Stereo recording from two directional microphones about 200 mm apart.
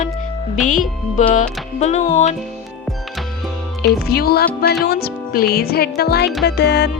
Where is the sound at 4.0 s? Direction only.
50° left (ahead or behind).